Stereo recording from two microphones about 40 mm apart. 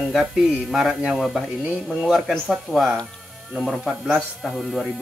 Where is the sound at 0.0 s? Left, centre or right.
Centre.